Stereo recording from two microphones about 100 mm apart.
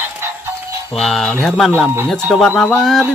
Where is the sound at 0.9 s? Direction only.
5° left (ahead or behind).